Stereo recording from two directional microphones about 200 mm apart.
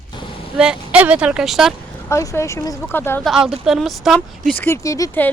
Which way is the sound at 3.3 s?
5° right (ahead or behind).